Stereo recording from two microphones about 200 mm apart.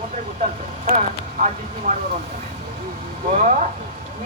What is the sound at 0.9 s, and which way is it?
Speech, 35° right (ahead or behind).